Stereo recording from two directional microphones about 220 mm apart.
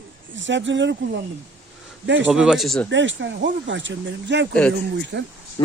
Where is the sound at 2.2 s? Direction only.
5° right (ahead or behind).